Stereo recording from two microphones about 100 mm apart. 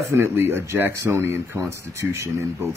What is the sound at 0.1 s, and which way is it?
Speech, 25° right (ahead or behind).